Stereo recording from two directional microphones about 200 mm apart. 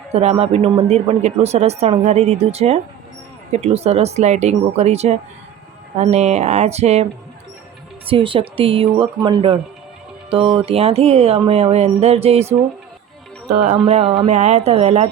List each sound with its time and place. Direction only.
0.1 s speech: 30° right (ahead or behind)